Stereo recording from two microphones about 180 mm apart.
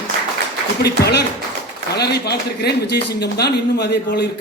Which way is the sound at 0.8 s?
65° left (ahead or behind).